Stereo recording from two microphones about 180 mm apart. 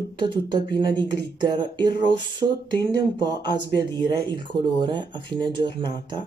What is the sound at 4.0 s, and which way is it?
Speech, 25° right (ahead or behind).